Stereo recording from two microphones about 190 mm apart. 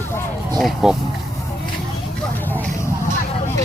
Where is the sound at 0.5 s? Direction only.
Centre (ahead or behind).